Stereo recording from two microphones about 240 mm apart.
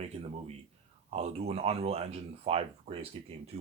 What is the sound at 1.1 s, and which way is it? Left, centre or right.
Speech, right.